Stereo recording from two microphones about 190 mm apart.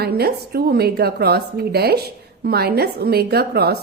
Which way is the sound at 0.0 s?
55° right (ahead or behind).